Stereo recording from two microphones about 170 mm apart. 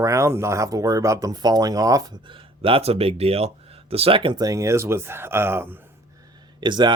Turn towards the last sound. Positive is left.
turn(degrees=-25)  # may be behind; listen again after turning